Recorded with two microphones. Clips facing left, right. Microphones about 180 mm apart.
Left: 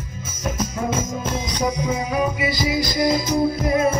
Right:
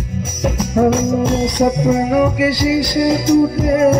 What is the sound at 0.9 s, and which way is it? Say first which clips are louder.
Music: right 9 dB; 90° right.